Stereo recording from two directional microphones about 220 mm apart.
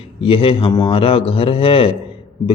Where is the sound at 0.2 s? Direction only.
25° left (ahead or behind).